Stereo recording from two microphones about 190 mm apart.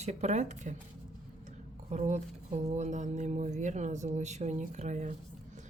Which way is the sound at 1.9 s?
40° right (ahead or behind).